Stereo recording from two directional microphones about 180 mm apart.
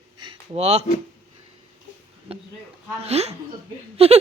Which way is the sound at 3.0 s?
35° right (ahead or behind).